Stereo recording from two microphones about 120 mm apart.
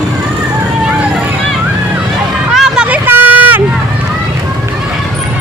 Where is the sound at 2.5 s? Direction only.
5° right (ahead or behind).